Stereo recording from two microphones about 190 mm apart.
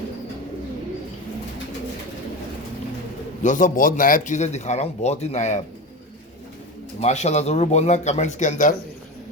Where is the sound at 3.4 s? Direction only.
40° left (ahead or behind).